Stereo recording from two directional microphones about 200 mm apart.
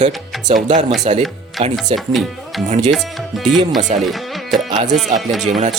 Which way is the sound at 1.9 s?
Centre (ahead or behind).